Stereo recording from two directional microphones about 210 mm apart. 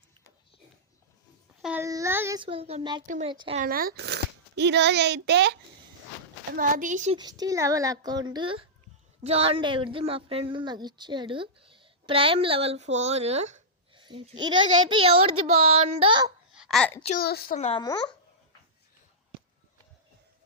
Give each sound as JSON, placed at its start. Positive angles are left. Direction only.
{"t": 1.6, "sound": "a child's voice", "side_deg": -10}
{"t": 2.4, "sound": "a woman's voice", "side_deg": -25}
{"t": 3.6, "sound": "a child's voice", "side_deg": -45}
{"t": 6.5, "sound": "speech", "side_deg": -40}
{"t": 7.2, "sound": "a woman's voice", "side_deg": -20}
{"t": 16.6, "sound": "a child's voice", "side_deg": 0}
{"t": 17.2, "sound": "speech", "side_deg": 45}
{"t": 17.6, "sound": "a child's voice", "side_deg": 30}